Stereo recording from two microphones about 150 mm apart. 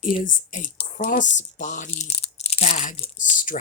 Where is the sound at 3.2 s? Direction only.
60° left (ahead or behind).